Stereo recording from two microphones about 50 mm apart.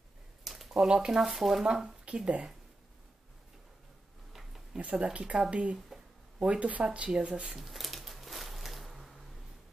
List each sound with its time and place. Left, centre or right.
0.4 s a sound: centre
0.7 s speech: centre
2.0 s speech: right
4.7 s speech: centre
5.1 s speech: centre
7.4 s a sound: centre